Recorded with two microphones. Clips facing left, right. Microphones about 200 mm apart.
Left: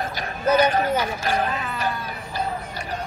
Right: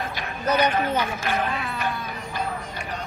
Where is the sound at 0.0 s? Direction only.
40° left (ahead or behind).